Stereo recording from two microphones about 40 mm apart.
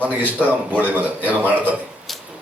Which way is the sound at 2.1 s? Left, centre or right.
Centre.